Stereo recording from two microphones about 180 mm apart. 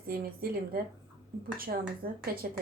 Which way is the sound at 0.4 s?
55° right (ahead or behind).